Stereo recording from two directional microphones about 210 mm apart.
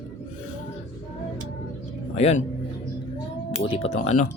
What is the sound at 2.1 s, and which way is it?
Speech, 30° left (ahead or behind).